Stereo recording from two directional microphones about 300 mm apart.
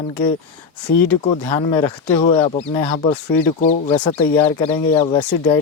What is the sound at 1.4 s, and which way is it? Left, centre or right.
Speech, centre.